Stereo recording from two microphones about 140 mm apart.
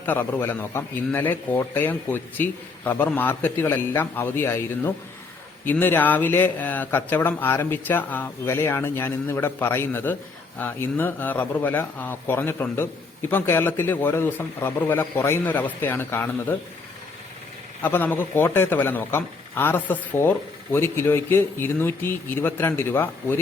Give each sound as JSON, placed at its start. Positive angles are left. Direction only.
{"t": 0.0, "sound": "a man's voice", "side_deg": 15}
{"t": 17.8, "sound": "a man's voice", "side_deg": 15}